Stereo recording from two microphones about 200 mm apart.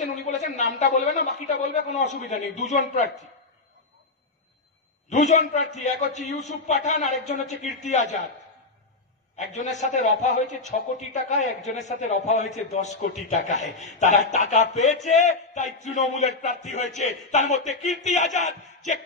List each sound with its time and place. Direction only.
0.3 s a man's voice: 35° left (ahead or behind)
5.1 s a man's voice: 40° left (ahead or behind)
9.4 s a man's voice: 35° left (ahead or behind)